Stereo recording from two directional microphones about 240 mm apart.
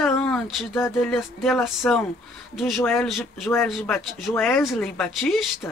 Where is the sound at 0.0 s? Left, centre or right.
Centre.